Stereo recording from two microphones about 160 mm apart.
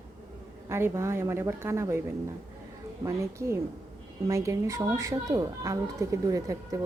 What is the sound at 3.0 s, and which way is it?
A woman's voice, 15° right (ahead or behind).